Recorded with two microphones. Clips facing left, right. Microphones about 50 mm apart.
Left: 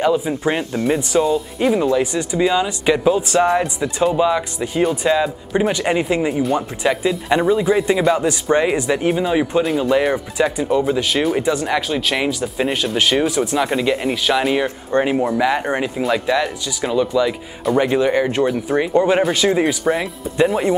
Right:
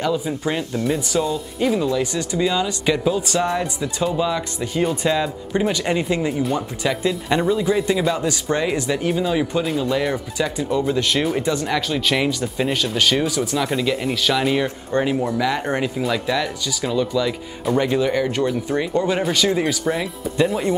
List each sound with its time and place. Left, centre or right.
0.0 s speech: left
1.8 s speech: left
13.6 s speech: centre